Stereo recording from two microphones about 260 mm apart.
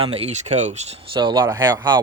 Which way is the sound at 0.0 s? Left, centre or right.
Right.